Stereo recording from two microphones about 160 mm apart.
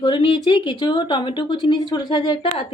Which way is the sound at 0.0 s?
30° left (ahead or behind).